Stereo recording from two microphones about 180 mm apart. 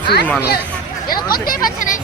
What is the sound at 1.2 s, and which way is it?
Speech, 55° left (ahead or behind).